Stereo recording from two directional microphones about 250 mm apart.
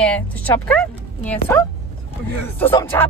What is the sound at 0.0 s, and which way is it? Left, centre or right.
Speech, centre.